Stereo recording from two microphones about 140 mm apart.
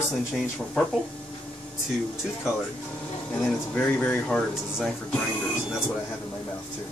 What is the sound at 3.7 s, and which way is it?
Speech, 10° left (ahead or behind).